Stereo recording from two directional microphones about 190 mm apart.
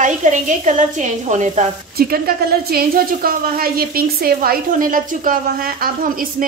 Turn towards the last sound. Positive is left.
turn(degrees=-50)  # may be behind; listen again after turning